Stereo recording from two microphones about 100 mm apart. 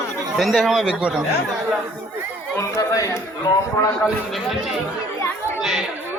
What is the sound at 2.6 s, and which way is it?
Chatter, 30° left (ahead or behind).